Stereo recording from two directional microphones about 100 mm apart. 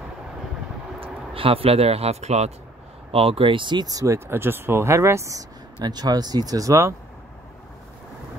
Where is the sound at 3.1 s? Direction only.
70° right (ahead or behind); by 4.2 s 35° right (ahead or behind).